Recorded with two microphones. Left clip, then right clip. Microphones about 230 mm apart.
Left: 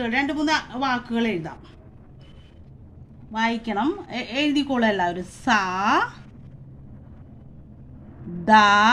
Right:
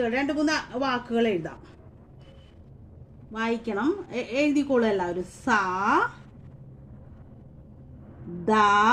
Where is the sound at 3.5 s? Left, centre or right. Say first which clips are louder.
Left 2 dB; left.